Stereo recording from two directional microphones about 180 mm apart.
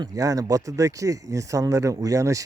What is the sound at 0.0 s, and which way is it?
Speech, 20° right (ahead or behind).